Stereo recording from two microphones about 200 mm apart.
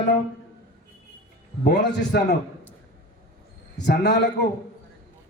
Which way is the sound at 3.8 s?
55° left (ahead or behind).